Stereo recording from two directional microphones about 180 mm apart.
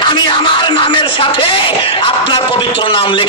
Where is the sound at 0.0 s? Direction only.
25° left (ahead or behind).